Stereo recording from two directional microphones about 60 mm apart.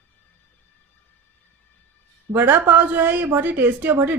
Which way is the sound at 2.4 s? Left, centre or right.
Right.